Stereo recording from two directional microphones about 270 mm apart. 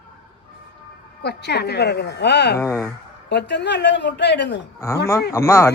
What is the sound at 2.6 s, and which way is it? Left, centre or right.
Speech, centre.